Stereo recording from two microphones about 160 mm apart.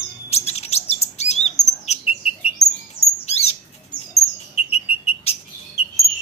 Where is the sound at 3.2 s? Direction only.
40° left (ahead or behind).